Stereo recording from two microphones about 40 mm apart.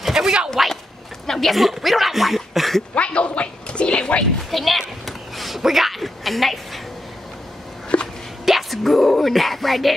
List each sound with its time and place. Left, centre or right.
0.0 s a sound: centre
0.6 s speech: centre
1.2 s speech: centre
1.5 s speech: centre
2.9 s speech: left
4.5 s speech: centre
7.9 s hiccup: left
8.5 s speech: centre